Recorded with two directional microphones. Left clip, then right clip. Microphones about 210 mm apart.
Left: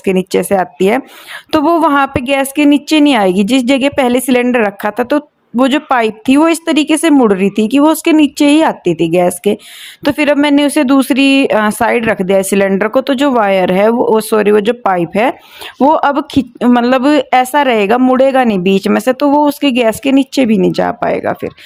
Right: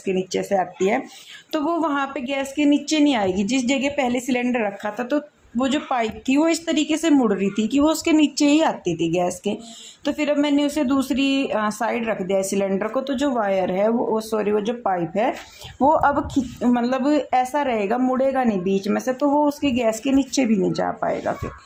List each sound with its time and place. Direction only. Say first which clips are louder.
0.0 s a woman's voice: left 11 dB; 50° left (ahead or behind)